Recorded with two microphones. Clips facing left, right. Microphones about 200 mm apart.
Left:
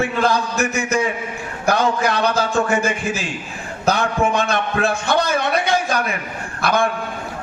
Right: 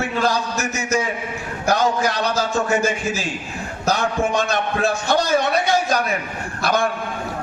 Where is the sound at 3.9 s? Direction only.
55° left (ahead or behind).